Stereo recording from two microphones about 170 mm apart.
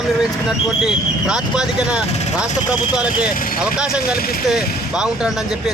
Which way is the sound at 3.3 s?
55° left (ahead or behind).